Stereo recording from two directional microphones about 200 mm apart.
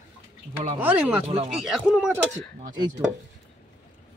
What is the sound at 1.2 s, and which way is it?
Speech, 30° right (ahead or behind).